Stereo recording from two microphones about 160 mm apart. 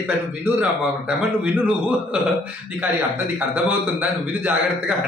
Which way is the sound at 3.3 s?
10° right (ahead or behind).